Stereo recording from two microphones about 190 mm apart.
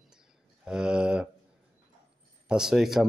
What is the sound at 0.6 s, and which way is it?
Speech, 5° right (ahead or behind).